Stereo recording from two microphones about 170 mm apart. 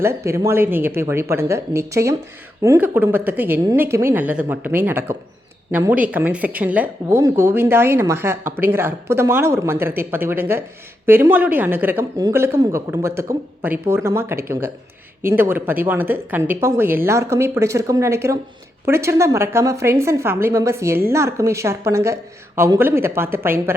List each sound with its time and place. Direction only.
0.0 s speech: 15° right (ahead or behind)